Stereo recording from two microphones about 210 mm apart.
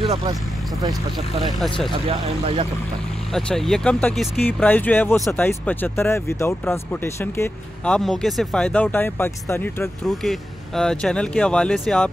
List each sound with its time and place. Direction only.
0.0 s speech: 25° right (ahead or behind)
1.4 s speech: centre (ahead or behind)
1.9 s speech: 25° right (ahead or behind)
3.3 s speech: centre (ahead or behind)